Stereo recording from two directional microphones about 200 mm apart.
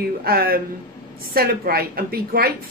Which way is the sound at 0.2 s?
50° right (ahead or behind).